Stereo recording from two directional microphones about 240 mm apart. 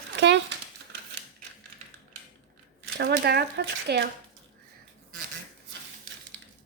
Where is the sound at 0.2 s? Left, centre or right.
Right.